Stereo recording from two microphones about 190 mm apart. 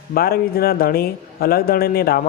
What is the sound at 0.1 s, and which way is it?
Speech, 55° left (ahead or behind).